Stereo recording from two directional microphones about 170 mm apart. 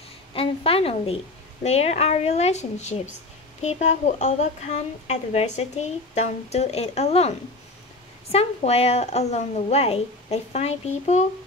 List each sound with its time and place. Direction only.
0.3 s a woman's voice: 35° left (ahead or behind)